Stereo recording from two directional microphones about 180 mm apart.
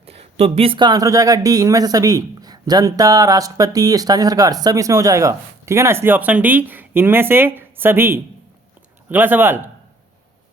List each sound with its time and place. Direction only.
0.0 s speech: 35° right (ahead or behind); by 9.6 s 10° right (ahead or behind)